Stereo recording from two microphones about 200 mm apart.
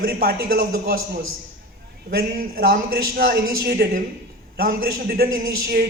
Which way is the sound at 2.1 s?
50° right (ahead or behind).